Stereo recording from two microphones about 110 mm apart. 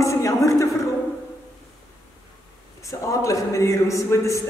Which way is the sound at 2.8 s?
30° left (ahead or behind).